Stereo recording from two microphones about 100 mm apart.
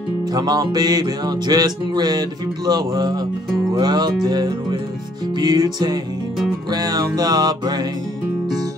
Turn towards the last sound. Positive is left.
turn(degrees=-45)  # may be behind; listen again after turning